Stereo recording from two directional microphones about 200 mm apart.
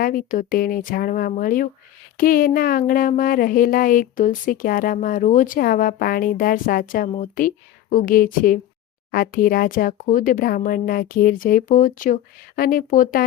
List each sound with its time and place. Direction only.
0.0 s speech: 45° left (ahead or behind)